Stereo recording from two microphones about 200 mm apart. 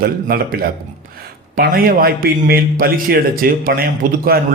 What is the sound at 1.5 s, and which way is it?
A man's voice, 45° right (ahead or behind).